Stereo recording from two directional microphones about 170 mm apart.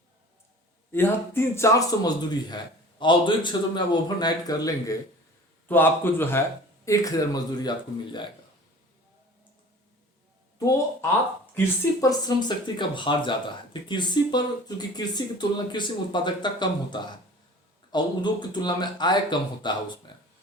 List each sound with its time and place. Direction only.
0.9 s a man's voice: 15° left (ahead or behind)
10.6 s speech: 20° left (ahead or behind)